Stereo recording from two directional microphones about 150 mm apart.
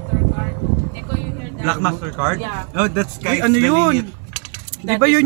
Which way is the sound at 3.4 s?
20° right (ahead or behind).